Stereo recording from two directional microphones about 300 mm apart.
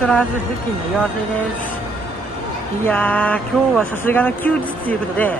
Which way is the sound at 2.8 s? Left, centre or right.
Centre.